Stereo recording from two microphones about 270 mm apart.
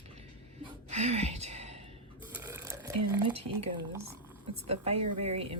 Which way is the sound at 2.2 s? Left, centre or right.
Centre.